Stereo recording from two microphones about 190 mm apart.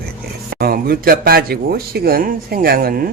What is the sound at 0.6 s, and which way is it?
Speech, 50° right (ahead or behind).